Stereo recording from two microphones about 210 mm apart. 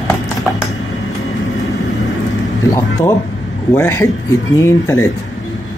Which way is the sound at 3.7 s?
10° left (ahead or behind).